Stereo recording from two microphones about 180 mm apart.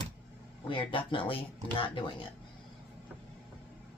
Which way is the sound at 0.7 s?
30° left (ahead or behind).